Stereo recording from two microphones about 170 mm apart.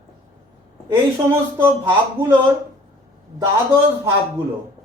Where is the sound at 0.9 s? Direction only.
15° right (ahead or behind).